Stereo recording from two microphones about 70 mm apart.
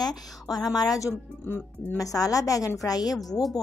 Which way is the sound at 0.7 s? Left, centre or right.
Left.